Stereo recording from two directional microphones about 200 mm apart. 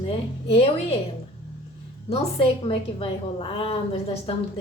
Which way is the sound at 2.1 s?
25° left (ahead or behind).